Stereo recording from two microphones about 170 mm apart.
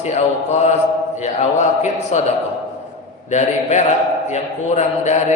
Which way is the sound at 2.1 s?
45° left (ahead or behind).